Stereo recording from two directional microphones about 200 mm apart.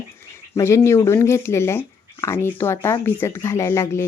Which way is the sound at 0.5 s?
15° left (ahead or behind).